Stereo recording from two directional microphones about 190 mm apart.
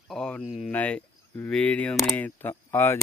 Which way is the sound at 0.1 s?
Centre (ahead or behind).